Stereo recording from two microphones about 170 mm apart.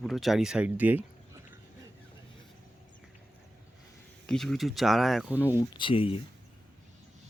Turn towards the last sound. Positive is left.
turn(degrees=35)  # may be behind; listen again after turning